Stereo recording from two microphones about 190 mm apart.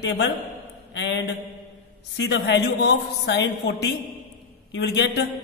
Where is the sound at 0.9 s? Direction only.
70° left (ahead or behind).